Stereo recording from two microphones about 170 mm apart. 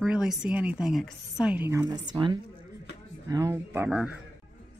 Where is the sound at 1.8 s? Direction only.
25° right (ahead or behind).